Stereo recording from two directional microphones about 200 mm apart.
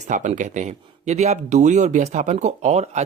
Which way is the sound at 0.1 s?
40° right (ahead or behind).